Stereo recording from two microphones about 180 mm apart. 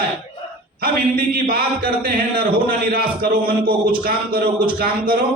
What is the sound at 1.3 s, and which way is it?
A man's voice, 55° right (ahead or behind).